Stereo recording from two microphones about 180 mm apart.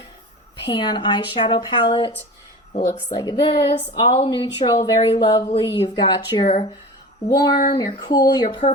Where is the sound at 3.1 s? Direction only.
25° left (ahead or behind).